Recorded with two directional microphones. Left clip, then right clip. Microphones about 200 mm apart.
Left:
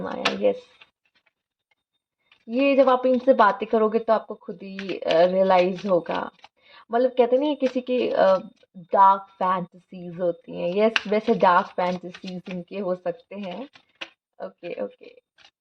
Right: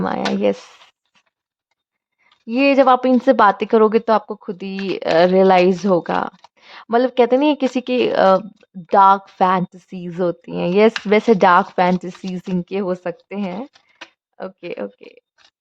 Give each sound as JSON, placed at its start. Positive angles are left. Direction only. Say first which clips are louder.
{"t": 0.0, "sound": "speech", "louder": "right 4 dB", "side_deg": -35}
{"t": 2.5, "sound": "speech", "louder": "right 5 dB", "side_deg": -35}